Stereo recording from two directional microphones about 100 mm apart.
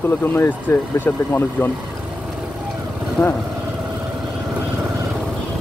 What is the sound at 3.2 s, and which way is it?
Speech, 20° left (ahead or behind).